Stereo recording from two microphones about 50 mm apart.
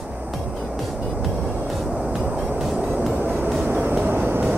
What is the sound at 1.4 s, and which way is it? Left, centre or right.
Music, right.